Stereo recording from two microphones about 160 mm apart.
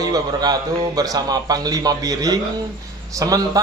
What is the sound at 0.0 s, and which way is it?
A man's voice, 25° right (ahead or behind).